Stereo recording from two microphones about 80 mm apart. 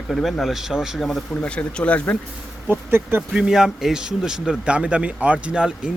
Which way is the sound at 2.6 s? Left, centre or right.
Right.